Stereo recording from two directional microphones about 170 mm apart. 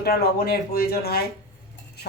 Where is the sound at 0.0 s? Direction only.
65° left (ahead or behind).